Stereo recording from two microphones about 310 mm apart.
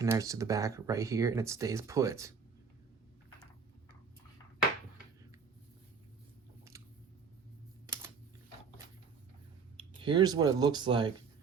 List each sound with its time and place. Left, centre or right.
0.0 s speech: centre
6.7 s scissors: centre
9.7 s speech: centre